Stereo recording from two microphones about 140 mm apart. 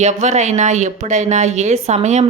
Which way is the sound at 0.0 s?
55° right (ahead or behind).